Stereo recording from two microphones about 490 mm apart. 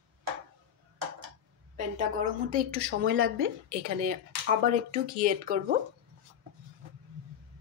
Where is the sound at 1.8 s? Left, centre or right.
Centre.